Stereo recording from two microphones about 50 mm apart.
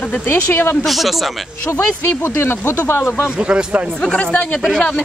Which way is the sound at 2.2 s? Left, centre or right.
Left.